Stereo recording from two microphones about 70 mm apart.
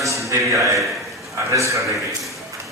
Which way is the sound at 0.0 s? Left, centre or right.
Right.